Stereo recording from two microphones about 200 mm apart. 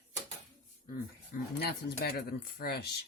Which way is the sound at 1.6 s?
50° left (ahead or behind).